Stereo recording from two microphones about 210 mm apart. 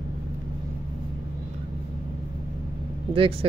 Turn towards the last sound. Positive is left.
turn(degrees=-25)  # may be behind; listen again after turning